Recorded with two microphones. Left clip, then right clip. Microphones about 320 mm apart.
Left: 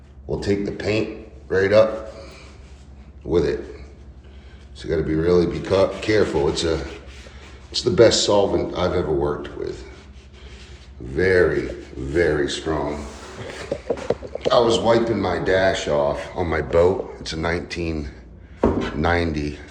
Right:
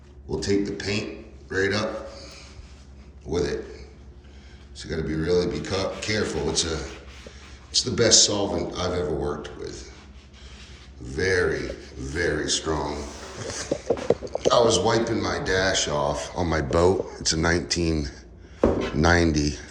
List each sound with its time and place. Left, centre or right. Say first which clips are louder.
0.3 s a man's voice: left 2 dB; centre
4.8 s speech: left 7 dB; centre
11.1 s speech: left 6 dB; centre
14.4 s a man's voice: left 3 dB; centre